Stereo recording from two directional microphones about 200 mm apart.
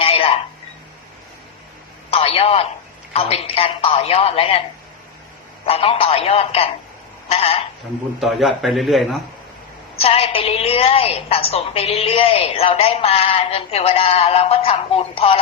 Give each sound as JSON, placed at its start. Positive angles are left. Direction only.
{"t": 0.0, "sound": "telephone", "side_deg": 30}
{"t": 2.0, "sound": "a man's voice", "side_deg": 30}
{"t": 5.6, "sound": "a woman's voice", "side_deg": 30}
{"t": 8.2, "sound": "a man's voice", "side_deg": 0}
{"t": 10.0, "sound": "a woman's voice", "side_deg": 30}